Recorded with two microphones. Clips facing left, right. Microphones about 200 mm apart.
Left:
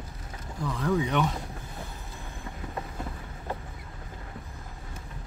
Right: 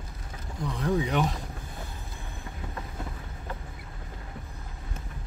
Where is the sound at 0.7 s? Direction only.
30° right (ahead or behind).